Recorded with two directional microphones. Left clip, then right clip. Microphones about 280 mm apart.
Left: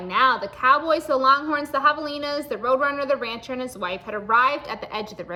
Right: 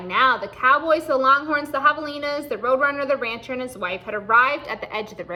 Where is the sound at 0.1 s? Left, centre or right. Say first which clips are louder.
Right 1 dB; centre.